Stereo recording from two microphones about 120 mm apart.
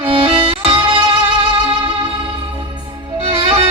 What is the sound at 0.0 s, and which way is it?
Music, 50° right (ahead or behind).